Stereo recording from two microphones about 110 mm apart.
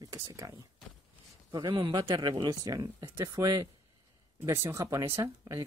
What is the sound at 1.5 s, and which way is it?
Speech, 35° right (ahead or behind).